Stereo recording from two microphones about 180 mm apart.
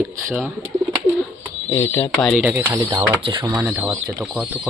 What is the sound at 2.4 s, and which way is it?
Speech, 10° right (ahead or behind).